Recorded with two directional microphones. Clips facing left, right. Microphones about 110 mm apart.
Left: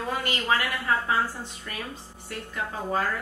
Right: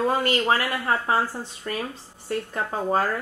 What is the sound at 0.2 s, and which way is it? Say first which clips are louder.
A woman's voice: right 4 dB; 40° right (ahead or behind).